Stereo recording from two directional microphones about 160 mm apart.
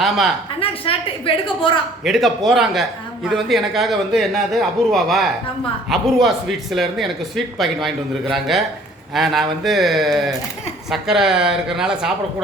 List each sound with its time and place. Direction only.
0.6 s a woman's voice: 35° left (ahead or behind)
2.0 s speech: centre (ahead or behind)